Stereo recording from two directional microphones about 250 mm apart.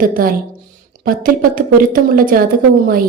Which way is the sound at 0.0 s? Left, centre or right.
Right.